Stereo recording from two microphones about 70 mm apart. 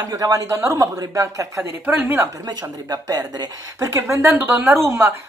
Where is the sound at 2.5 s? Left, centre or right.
Right.